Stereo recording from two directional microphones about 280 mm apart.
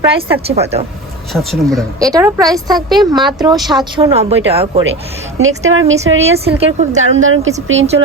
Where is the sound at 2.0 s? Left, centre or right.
Centre.